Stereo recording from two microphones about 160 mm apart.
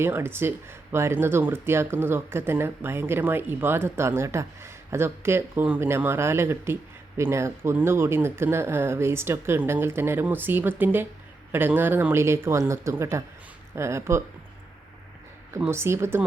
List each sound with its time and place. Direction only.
0.0 s speech: 15° right (ahead or behind)
15.5 s speech: 15° right (ahead or behind)